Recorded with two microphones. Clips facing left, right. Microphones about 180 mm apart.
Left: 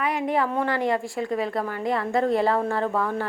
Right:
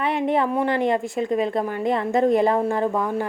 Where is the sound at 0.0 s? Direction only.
25° right (ahead or behind).